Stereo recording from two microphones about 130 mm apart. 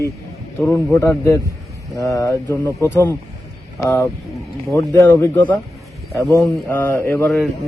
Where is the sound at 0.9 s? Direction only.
25° left (ahead or behind).